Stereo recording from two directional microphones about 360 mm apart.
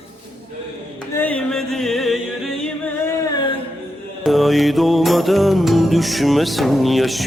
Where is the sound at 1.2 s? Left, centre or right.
Centre.